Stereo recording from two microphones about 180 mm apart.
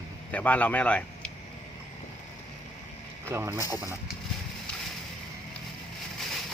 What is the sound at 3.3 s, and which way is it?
Speech, 15° right (ahead or behind).